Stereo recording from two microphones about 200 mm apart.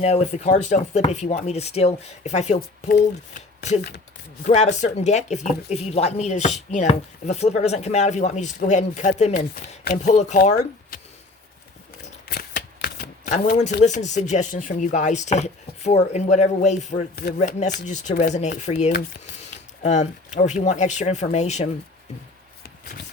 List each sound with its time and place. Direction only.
0.0 s speech: 35° left (ahead or behind)
3.8 s speech: 55° left (ahead or behind)
4.4 s speech: 35° left (ahead or behind)
9.3 s speech: 50° left (ahead or behind)
10.0 s speech: 35° left (ahead or behind)
10.9 s a sound: 45° left (ahead or behind)
12.3 s shuffling cards: 50° left (ahead or behind)
13.8 s speech: 35° left (ahead or behind)